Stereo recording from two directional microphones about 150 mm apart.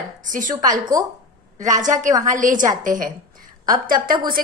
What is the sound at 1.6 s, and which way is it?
A woman's voice, 55° right (ahead or behind).